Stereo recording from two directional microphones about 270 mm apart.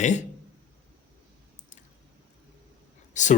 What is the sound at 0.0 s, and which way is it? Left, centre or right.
Speech, left.